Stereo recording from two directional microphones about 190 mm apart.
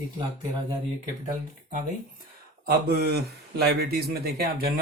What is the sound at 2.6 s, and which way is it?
Speech, 55° right (ahead or behind).